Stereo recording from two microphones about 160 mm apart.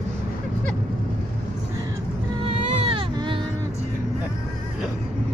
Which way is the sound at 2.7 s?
35° right (ahead or behind).